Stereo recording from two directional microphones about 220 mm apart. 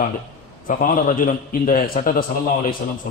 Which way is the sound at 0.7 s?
40° left (ahead or behind).